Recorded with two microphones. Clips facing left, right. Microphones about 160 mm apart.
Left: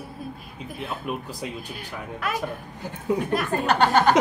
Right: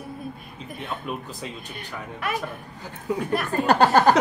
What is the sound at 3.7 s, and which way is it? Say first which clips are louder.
Speech: right 2 dB; 35° right (ahead or behind).